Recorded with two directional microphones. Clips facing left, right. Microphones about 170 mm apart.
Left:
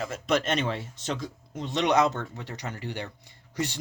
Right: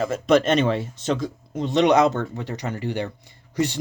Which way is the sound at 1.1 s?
90° right.